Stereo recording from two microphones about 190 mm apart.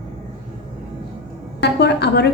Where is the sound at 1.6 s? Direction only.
60° left (ahead or behind).